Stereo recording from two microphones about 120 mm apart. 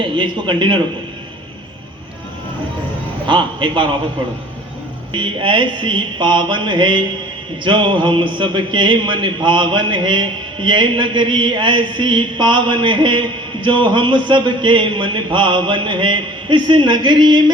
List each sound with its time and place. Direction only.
0.0 s a man's voice: 40° right (ahead or behind)
3.2 s a man's voice: 40° right (ahead or behind)
5.1 s a man's voice: 45° right (ahead or behind)